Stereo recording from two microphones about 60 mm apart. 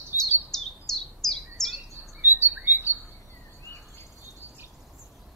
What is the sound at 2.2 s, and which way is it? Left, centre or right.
Chirp, right.